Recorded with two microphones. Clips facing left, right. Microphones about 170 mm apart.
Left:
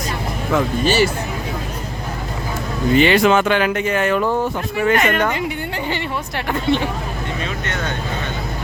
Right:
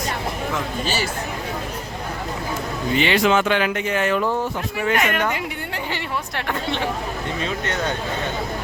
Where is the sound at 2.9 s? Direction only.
50° left (ahead or behind).